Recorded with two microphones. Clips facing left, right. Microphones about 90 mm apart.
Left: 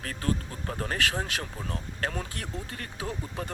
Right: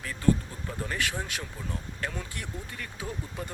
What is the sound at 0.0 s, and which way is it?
Speech, 60° left (ahead or behind).